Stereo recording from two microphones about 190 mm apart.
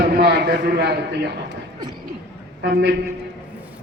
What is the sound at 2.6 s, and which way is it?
Speech, 65° right (ahead or behind).